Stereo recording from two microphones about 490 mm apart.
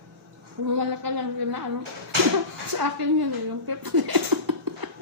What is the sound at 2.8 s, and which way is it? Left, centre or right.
Speech, right.